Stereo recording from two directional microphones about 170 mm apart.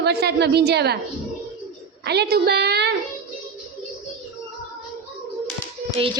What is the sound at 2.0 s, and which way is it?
Speech, 75° right (ahead or behind).